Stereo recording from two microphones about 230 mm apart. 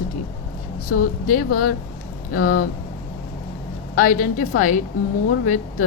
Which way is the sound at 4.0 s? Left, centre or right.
Left.